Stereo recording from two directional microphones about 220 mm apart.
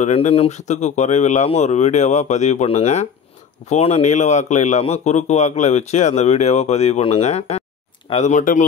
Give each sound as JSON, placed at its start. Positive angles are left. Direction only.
{"t": 0.0, "sound": "a man's voice", "side_deg": 30}